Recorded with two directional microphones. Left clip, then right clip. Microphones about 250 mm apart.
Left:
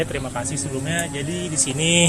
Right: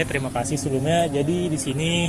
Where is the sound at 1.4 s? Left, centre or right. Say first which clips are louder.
Left 3 dB; centre.